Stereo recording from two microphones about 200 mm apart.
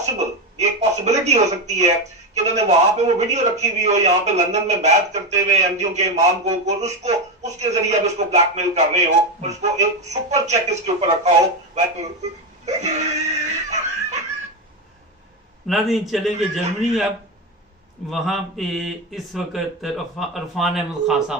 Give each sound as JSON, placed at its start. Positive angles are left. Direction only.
{"t": 0.0, "sound": "a man's voice", "side_deg": -35}
{"t": 15.6, "sound": "a man's voice", "side_deg": 0}
{"t": 18.1, "sound": "a man's voice", "side_deg": 0}